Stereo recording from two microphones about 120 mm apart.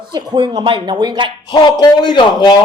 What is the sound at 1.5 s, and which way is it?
Speech, 35° left (ahead or behind).